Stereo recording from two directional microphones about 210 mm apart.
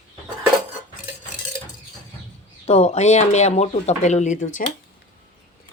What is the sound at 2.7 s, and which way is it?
Speech, 30° left (ahead or behind).